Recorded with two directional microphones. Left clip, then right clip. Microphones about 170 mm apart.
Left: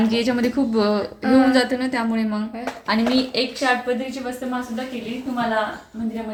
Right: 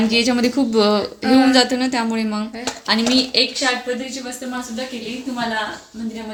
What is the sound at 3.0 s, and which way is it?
A woman's voice, 20° right (ahead or behind).